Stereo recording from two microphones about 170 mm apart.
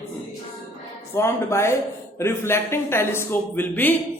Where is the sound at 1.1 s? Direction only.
15° left (ahead or behind).